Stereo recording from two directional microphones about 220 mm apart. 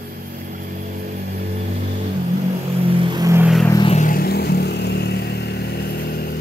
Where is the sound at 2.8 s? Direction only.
25° right (ahead or behind).